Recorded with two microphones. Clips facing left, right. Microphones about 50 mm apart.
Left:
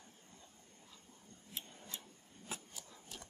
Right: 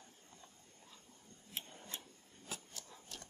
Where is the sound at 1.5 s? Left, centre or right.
Right.